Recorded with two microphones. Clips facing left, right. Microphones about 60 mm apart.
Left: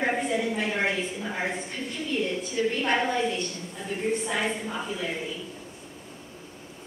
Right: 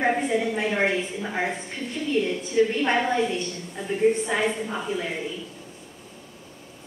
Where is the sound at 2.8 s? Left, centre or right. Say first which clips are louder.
Right 2 dB; centre.